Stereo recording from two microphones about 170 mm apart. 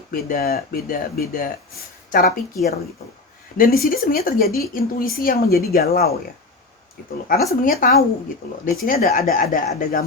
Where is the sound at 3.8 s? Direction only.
60° left (ahead or behind).